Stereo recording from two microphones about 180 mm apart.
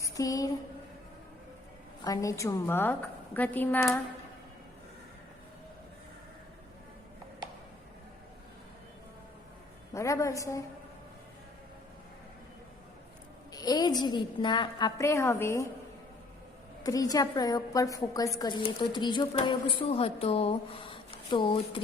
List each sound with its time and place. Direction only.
0.0 s a woman's voice: 20° left (ahead or behind)
2.0 s a woman's voice: 20° left (ahead or behind)
9.9 s a woman's voice: 15° left (ahead or behind)
13.5 s a woman's voice: 20° left (ahead or behind)
16.8 s a woman's voice: 20° left (ahead or behind)